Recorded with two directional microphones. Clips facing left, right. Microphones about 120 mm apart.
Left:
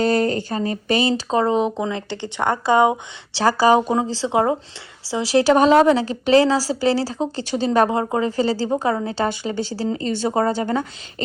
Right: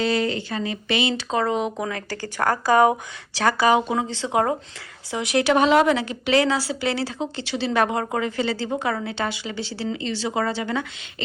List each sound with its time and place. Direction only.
0.0 s speech: 45° left (ahead or behind)